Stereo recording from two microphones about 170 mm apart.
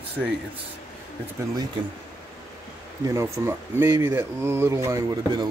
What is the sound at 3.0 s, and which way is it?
Speech, 15° right (ahead or behind).